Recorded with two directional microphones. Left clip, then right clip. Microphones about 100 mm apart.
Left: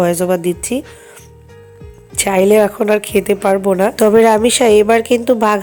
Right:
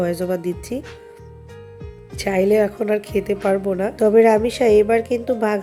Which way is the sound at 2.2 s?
35° left (ahead or behind).